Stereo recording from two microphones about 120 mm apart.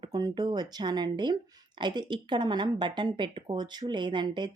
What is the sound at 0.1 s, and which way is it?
A woman's voice, 35° right (ahead or behind).